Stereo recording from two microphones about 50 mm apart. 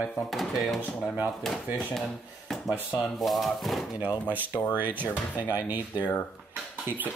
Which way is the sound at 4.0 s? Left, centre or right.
Right.